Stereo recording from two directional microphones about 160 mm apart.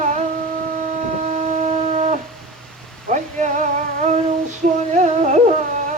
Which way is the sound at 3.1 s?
50° right (ahead or behind).